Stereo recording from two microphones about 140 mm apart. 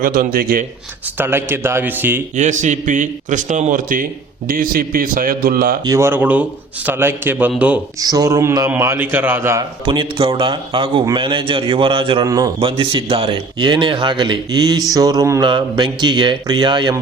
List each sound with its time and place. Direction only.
0.0 s a man's voice: 90° right
1.2 s a man's voice: 15° right (ahead or behind)
2.3 s a man's voice: 60° right (ahead or behind); by 4.0 s 75° right (ahead or behind)
4.4 s a man's voice: 90° right
5.8 s a man's voice: 20° right (ahead or behind)
7.9 s mantra: 25° right (ahead or behind)
8.8 s a man's voice: 15° right (ahead or behind)
9.8 s a man's voice: 35° right (ahead or behind)
12.2 s mantra: 25° right (ahead or behind)
12.5 s a man's voice: 40° right (ahead or behind)